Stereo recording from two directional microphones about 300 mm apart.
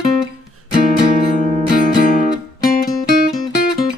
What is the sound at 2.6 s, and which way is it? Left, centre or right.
Music, left.